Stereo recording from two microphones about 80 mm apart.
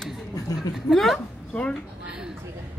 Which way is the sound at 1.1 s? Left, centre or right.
Centre.